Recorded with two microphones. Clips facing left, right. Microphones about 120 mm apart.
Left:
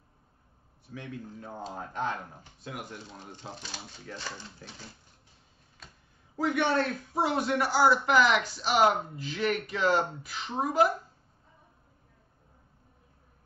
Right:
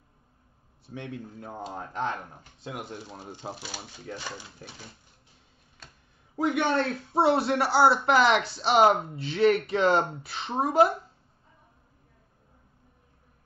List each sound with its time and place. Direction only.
0.8 s speech: 25° right (ahead or behind)
3.1 s speech: 35° right (ahead or behind)
3.5 s speech: 10° right (ahead or behind)
6.3 s speech: 20° right (ahead or behind)